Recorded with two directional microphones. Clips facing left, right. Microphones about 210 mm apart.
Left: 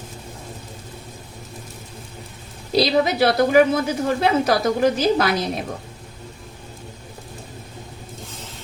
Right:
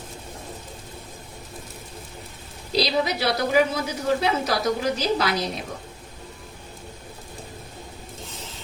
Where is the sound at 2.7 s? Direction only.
55° left (ahead or behind).